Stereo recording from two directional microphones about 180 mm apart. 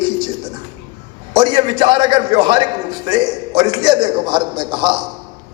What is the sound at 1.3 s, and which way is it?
A man's voice, 25° right (ahead or behind).